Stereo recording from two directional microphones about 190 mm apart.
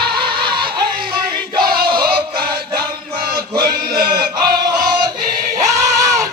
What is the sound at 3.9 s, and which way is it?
Choir, 50° right (ahead or behind).